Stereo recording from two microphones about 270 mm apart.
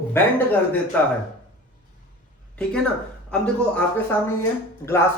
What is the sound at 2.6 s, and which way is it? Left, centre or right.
Speech, centre.